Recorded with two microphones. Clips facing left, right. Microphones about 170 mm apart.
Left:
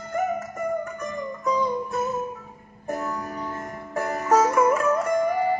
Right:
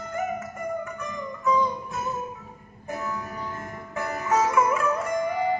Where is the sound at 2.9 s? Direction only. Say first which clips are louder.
Left 3 dB; 40° left (ahead or behind).